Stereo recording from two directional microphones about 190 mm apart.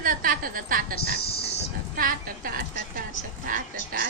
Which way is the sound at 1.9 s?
50° right (ahead or behind).